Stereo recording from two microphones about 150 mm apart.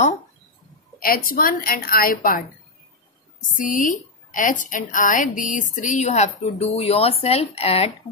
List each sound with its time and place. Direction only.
0.9 s a woman's voice: 70° left (ahead or behind)
3.3 s a woman's voice: 60° left (ahead or behind); by 7.9 s 40° left (ahead or behind)